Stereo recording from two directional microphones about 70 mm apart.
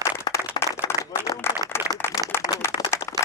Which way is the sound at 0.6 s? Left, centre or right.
Left.